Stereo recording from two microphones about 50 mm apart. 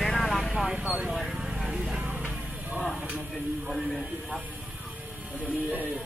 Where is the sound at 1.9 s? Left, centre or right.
Right.